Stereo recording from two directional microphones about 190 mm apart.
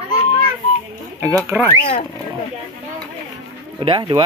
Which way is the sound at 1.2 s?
15° right (ahead or behind).